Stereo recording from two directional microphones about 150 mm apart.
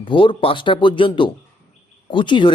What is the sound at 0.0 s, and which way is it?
A man's voice, 35° left (ahead or behind).